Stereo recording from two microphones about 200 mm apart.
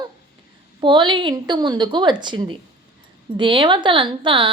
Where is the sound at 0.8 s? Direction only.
25° right (ahead or behind).